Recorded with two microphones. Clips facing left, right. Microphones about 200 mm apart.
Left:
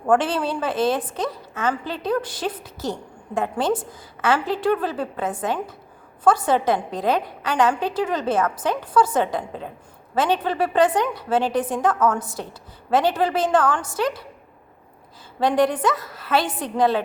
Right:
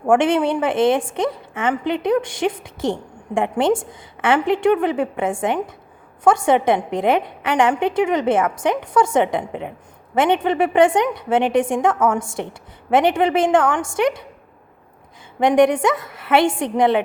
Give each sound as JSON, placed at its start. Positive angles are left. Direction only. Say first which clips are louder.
{"t": 0.2, "sound": "a woman's voice", "louder": "right 6 dB", "side_deg": -20}
{"t": 15.4, "sound": "a woman's voice", "louder": "right 5 dB", "side_deg": -20}